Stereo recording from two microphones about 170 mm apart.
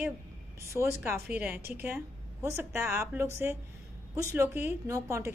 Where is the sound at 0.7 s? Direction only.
15° right (ahead or behind).